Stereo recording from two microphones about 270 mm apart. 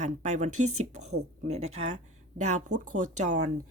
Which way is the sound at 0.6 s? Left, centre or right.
Right.